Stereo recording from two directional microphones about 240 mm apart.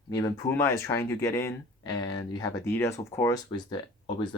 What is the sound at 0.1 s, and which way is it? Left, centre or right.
Speech, centre.